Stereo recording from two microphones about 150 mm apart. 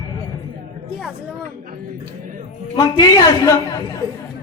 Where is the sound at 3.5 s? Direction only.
25° left (ahead or behind).